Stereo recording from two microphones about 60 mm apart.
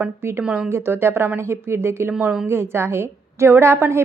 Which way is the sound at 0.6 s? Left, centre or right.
Right.